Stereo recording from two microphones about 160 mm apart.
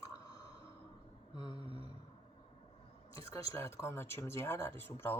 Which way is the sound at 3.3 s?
20° left (ahead or behind).